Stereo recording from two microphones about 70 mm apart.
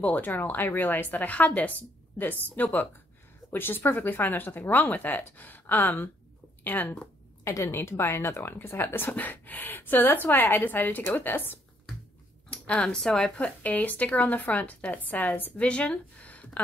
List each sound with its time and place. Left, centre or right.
0.0 s speech: left
7.4 s speech: left
12.4 s speech: centre